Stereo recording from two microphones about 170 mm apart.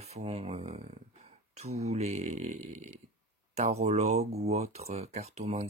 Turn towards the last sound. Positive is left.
turn(degrees=-40)  # may be behind; listen again after turning